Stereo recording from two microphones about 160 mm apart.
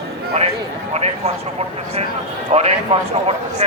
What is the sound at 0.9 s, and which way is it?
A man's voice, 40° right (ahead or behind).